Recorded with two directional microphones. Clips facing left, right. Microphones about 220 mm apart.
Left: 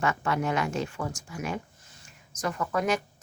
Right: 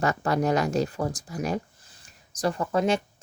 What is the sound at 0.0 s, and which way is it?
Speech, 40° right (ahead or behind).